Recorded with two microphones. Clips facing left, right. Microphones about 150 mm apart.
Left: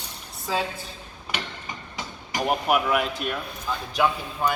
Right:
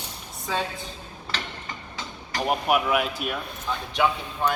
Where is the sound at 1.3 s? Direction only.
15° left (ahead or behind).